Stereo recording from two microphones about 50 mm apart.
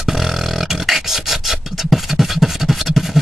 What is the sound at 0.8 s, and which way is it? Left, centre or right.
Filing, centre.